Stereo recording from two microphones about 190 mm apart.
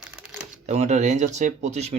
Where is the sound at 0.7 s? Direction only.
35° right (ahead or behind).